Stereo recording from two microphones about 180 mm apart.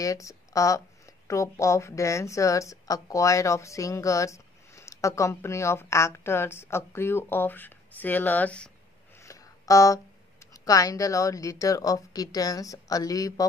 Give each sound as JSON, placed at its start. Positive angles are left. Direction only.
{"t": 0.0, "sound": "speech", "side_deg": 20}
{"t": 9.2, "sound": "a sound", "side_deg": 15}
{"t": 10.5, "sound": "a woman's voice", "side_deg": 20}